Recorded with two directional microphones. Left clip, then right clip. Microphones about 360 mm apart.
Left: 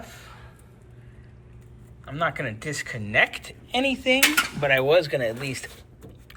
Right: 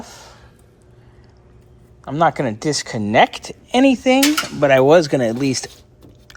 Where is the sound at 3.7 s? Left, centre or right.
Right.